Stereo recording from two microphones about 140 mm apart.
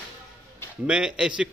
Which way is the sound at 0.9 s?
5° right (ahead or behind).